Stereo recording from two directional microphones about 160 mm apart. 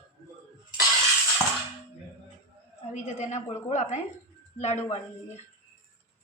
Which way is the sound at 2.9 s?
45° left (ahead or behind).